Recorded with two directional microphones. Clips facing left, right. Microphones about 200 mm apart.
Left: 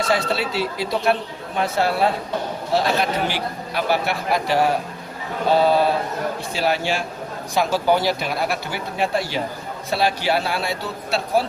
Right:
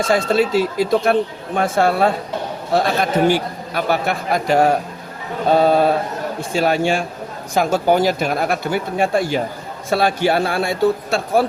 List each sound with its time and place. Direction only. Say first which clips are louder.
0.1 s speech: right 10 dB; 45° right (ahead or behind)